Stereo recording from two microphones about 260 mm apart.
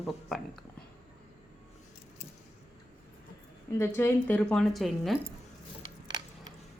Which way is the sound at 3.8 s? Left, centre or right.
Centre.